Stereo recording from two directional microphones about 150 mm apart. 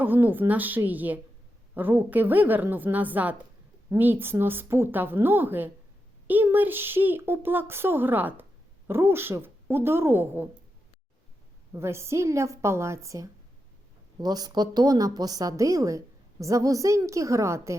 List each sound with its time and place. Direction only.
0.0 s speech: 15° right (ahead or behind)
11.7 s a woman's voice: 15° right (ahead or behind)